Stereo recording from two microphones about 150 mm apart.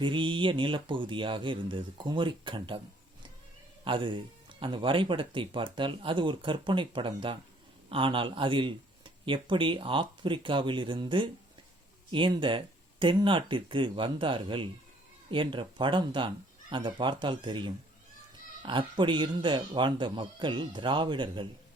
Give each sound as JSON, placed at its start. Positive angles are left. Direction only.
{"t": 0.0, "sound": "speech", "side_deg": -35}
{"t": 3.8, "sound": "speech", "side_deg": -35}